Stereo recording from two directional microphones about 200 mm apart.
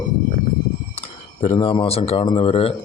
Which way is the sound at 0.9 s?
30° left (ahead or behind).